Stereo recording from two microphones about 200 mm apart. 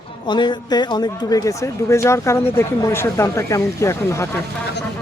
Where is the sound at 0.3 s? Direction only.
25° left (ahead or behind).